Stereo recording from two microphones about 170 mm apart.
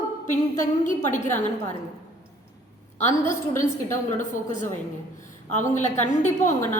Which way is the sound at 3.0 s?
40° left (ahead or behind).